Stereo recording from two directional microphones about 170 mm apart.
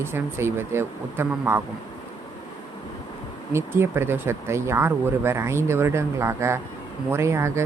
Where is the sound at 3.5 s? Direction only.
15° right (ahead or behind).